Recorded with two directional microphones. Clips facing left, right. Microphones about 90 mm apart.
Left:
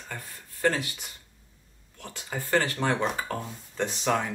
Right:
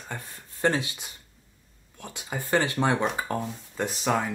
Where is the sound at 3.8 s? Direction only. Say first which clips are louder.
Right 1 dB; 5° right (ahead or behind).